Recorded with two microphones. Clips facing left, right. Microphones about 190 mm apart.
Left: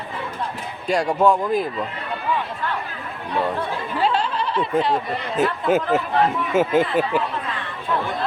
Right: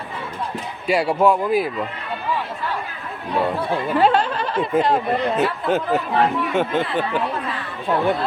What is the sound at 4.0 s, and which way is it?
Snicker, 55° right (ahead or behind).